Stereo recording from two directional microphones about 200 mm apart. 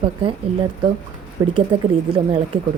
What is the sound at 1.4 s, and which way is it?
Speech, 20° right (ahead or behind).